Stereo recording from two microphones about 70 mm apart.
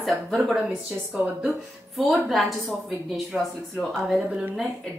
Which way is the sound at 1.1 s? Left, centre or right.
Centre.